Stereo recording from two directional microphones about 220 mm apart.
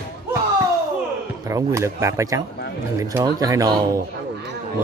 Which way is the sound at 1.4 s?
15° right (ahead or behind).